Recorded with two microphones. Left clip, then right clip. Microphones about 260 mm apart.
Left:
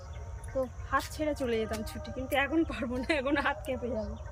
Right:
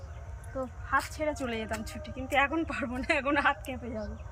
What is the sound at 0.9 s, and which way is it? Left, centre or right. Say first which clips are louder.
A woman's voice: right 2 dB; centre.